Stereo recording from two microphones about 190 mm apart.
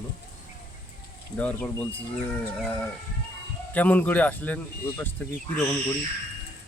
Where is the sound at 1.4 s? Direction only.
10° left (ahead or behind).